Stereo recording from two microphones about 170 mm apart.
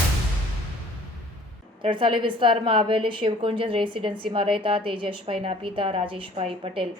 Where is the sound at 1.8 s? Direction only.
30° right (ahead or behind).